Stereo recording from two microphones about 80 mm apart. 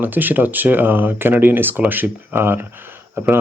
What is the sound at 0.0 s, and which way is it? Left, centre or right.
Speech, right.